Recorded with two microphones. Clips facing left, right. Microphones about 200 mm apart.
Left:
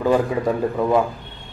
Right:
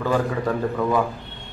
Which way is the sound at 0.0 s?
20° left (ahead or behind).